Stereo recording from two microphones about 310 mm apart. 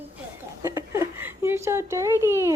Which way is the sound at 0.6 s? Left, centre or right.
Centre.